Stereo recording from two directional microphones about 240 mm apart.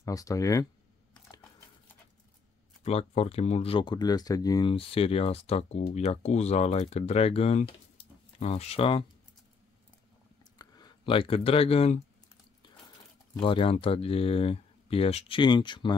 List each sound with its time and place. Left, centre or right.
0.0 s speech: centre
2.8 s speech: left
10.6 s speech: centre
13.4 s speech: left